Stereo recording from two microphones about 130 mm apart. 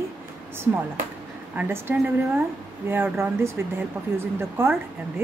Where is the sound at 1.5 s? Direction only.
15° right (ahead or behind).